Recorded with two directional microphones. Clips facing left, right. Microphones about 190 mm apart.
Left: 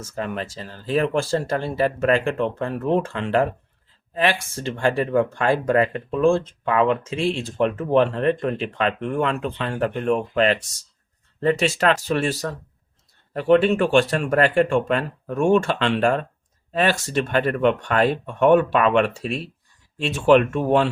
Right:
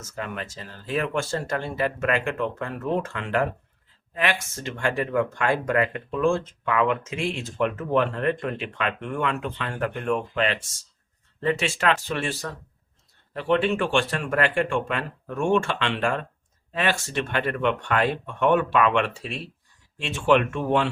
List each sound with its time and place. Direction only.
0.0 s speech: 35° left (ahead or behind)